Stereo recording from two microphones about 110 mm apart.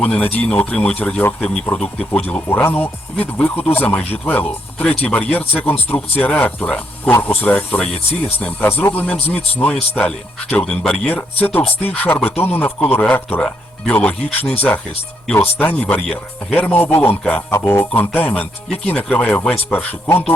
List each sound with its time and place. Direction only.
0.0 s speech: 15° left (ahead or behind)